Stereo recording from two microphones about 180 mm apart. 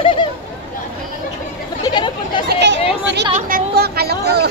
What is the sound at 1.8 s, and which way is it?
Speech, 25° left (ahead or behind).